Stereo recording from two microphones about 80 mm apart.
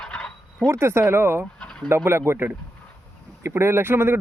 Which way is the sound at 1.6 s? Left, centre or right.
Centre.